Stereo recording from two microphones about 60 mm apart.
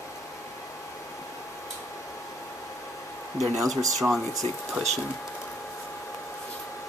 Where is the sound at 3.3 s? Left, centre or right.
Centre.